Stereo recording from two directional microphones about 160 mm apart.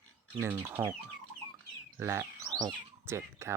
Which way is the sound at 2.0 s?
15° right (ahead or behind).